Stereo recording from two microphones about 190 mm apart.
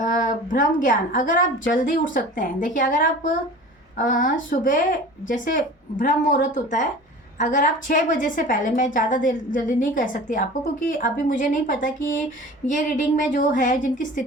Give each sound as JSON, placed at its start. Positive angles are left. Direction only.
{"t": 0.0, "sound": "a woman's voice", "side_deg": 45}